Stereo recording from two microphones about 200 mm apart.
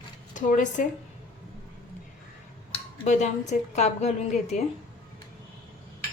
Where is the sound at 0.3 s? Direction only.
40° left (ahead or behind).